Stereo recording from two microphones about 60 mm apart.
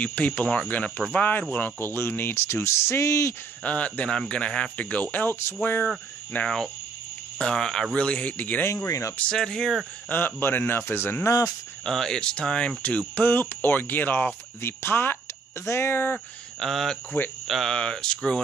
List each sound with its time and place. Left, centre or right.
0.0 s speech: left
3.6 s speech: left
6.4 s speech: centre
7.9 s speech: centre
8.8 s speech: left
9.3 s speech: centre
10.0 s speech: left
11.2 s speech: left
11.8 s speech: centre; by 16.0 s left
16.5 s speech: centre